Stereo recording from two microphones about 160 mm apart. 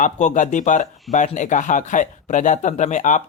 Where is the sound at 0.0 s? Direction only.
50° left (ahead or behind).